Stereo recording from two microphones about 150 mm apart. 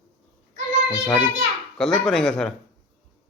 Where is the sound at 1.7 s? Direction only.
5° left (ahead or behind).